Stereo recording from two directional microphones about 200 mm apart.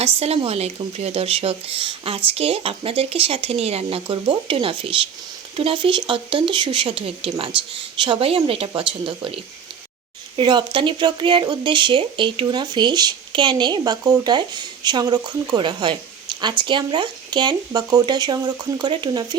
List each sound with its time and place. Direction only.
0.2 s speech: 30° right (ahead or behind)